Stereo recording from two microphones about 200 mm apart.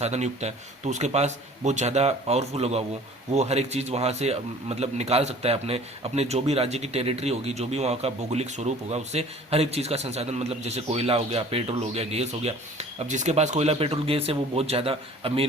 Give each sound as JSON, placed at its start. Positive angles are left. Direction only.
{"t": 0.0, "sound": "a man's voice", "side_deg": -35}